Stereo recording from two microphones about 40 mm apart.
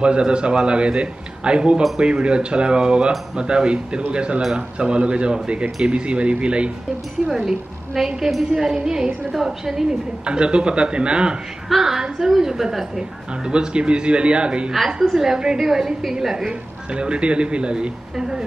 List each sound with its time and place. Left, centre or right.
0.0 s a man's voice: right
7.4 s a woman's voice: centre; by 11.3 s right
11.8 s a woman's voice: centre
13.5 s a man's voice: right
15.0 s a woman's voice: centre
16.9 s a man's voice: right
18.1 s speech: centre